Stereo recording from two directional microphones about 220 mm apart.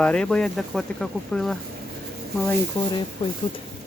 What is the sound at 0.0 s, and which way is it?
Speech, 5° left (ahead or behind).